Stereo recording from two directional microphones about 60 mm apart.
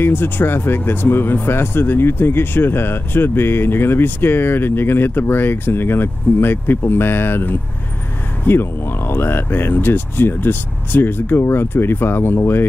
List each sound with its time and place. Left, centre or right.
0.0 s speech: left